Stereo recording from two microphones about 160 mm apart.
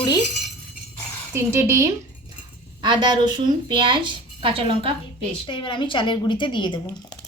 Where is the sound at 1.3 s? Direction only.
15° right (ahead or behind).